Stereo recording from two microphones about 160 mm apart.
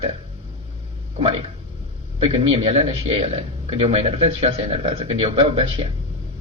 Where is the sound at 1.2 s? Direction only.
35° right (ahead or behind).